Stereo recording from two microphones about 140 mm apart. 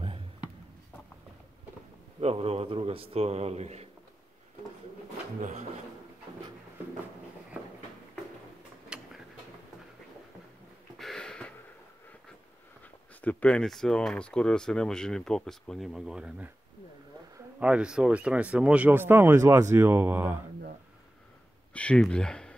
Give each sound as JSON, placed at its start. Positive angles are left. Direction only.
{"t": 2.1, "sound": "a man's voice", "side_deg": -45}
{"t": 5.4, "sound": "a man's voice", "side_deg": -55}
{"t": 8.8, "sound": "tick-tock", "side_deg": -5}
{"t": 11.0, "sound": "a sound", "side_deg": 5}
{"t": 13.2, "sound": "speech", "side_deg": 10}
{"t": 17.6, "sound": "speech", "side_deg": -10}
{"t": 21.7, "sound": "speech", "side_deg": 10}